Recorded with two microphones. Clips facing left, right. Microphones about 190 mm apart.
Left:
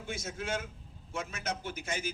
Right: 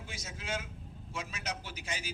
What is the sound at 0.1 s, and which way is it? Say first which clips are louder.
A man's voice: left 4 dB; 50° left (ahead or behind).